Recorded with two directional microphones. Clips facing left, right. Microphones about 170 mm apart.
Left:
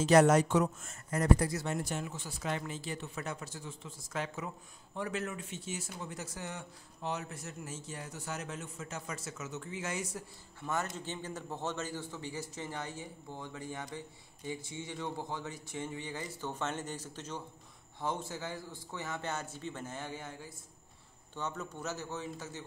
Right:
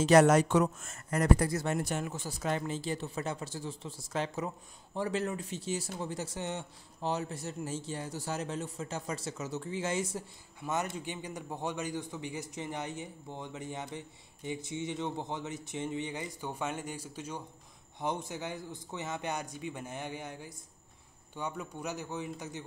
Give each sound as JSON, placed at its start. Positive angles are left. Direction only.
{"t": 0.0, "sound": "speech", "side_deg": -75}
{"t": 2.2, "sound": "speech", "side_deg": -40}
{"t": 10.7, "sound": "a man's voice", "side_deg": -15}